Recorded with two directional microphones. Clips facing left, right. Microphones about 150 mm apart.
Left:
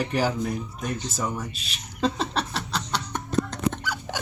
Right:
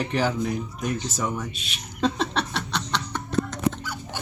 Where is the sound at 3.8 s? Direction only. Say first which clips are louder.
Left 3 dB; 90° left.